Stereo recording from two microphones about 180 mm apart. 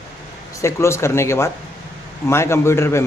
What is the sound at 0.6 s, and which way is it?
A man's voice, 15° left (ahead or behind).